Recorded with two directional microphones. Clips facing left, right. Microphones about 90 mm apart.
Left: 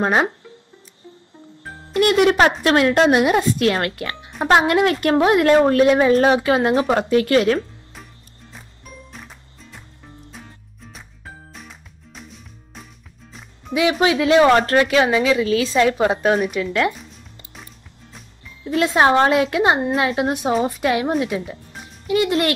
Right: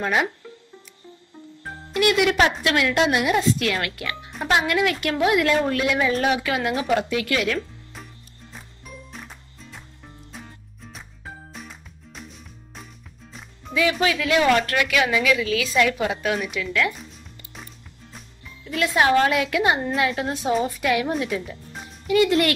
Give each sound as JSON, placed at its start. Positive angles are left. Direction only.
{"t": 0.0, "sound": "a woman's voice", "side_deg": 35}
{"t": 2.0, "sound": "a woman's voice", "side_deg": 40}
{"t": 7.9, "sound": "music", "side_deg": 0}
{"t": 13.7, "sound": "a woman's voice", "side_deg": 25}
{"t": 18.6, "sound": "a woman's voice", "side_deg": 30}
{"t": 20.2, "sound": "a woman's voice", "side_deg": 25}